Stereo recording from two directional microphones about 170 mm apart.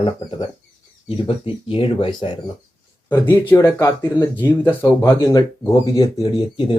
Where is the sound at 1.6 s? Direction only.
30° left (ahead or behind).